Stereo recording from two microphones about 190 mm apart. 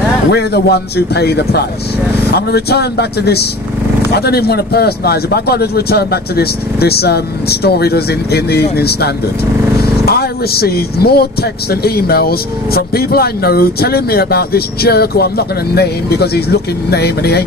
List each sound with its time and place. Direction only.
0.3 s speech: 60° left (ahead or behind)